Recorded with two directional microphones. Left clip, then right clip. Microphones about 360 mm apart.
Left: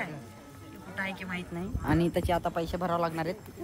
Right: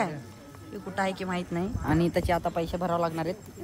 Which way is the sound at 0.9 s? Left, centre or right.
Centre.